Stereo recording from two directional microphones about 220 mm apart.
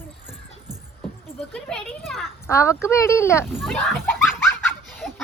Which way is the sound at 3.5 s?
Centre (ahead or behind).